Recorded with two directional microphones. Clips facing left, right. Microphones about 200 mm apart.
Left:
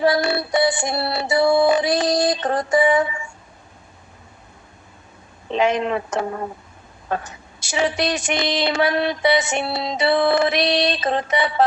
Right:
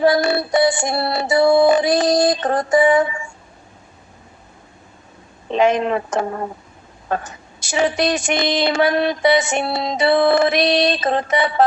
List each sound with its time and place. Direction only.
0.0 s a woman's voice: 45° right (ahead or behind)
5.5 s a woman's voice: 45° right (ahead or behind)